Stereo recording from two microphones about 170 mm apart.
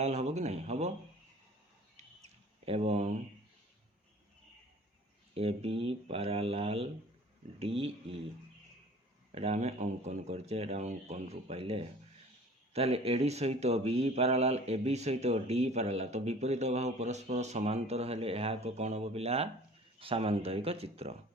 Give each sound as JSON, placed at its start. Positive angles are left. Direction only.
{"t": 0.0, "sound": "speech", "side_deg": -40}
{"t": 2.0, "sound": "bird", "side_deg": -35}
{"t": 5.3, "sound": "speech", "side_deg": -35}
{"t": 9.3, "sound": "speech", "side_deg": -40}